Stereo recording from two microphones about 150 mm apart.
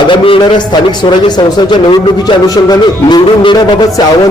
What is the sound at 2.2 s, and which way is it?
Speech, 25° left (ahead or behind).